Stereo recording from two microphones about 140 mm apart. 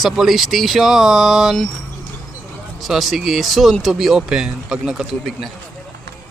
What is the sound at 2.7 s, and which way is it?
A man's voice, centre (ahead or behind).